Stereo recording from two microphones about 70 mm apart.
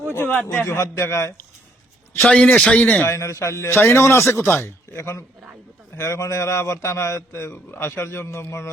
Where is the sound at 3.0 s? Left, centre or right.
Left.